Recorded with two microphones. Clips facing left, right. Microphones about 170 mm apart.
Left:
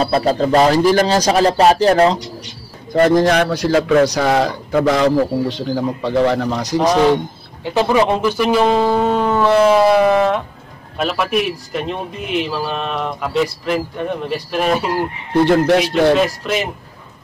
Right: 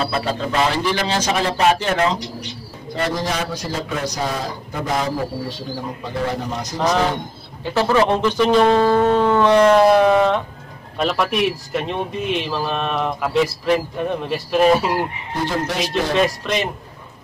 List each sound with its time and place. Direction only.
0.0 s speech: 40° left (ahead or behind)
2.9 s a man's voice: 50° left (ahead or behind); by 6.8 s 75° left (ahead or behind)
7.6 s speech: 15° left (ahead or behind); by 14.9 s centre (ahead or behind)
15.3 s speech: 65° left (ahead or behind)
15.9 s speech: centre (ahead or behind)